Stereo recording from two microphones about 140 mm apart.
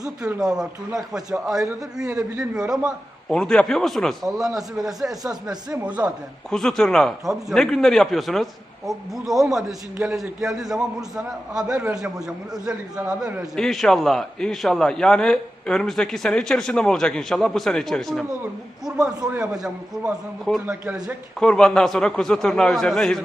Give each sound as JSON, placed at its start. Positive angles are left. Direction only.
{"t": 0.0, "sound": "a man's voice", "side_deg": -25}
{"t": 0.3, "sound": "a man's voice", "side_deg": -5}
{"t": 3.3, "sound": "a man's voice", "side_deg": 5}
{"t": 6.5, "sound": "a man's voice", "side_deg": 5}
{"t": 21.3, "sound": "a man's voice", "side_deg": 5}